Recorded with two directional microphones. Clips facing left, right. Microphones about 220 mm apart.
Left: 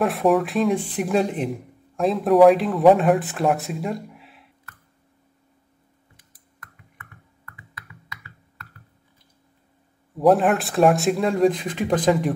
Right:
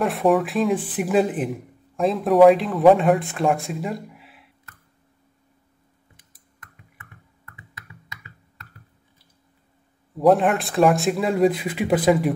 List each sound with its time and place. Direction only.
0.0 s speech: centre (ahead or behind)
6.6 s a sound: 25° right (ahead or behind)
10.1 s speech: centre (ahead or behind)